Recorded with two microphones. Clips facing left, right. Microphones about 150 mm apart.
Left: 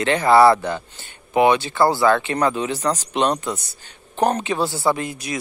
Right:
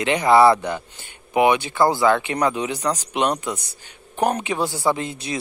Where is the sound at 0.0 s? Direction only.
15° right (ahead or behind).